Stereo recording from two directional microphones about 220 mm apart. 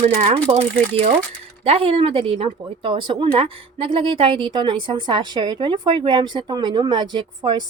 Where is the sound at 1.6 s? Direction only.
25° right (ahead or behind).